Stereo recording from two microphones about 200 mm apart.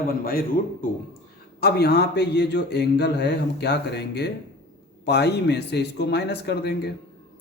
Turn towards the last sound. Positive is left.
turn(degrees=55)  # may be behind; listen again after turning